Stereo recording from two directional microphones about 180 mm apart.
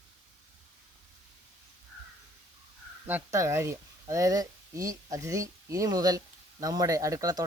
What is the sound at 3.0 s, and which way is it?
Speech, 15° right (ahead or behind).